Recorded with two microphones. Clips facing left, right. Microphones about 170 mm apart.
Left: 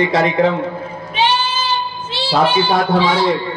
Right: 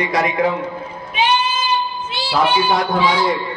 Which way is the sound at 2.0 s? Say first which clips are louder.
Left 4 dB; 30° left (ahead or behind).